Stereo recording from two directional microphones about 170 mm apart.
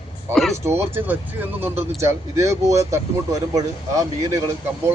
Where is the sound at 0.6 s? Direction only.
15° right (ahead or behind).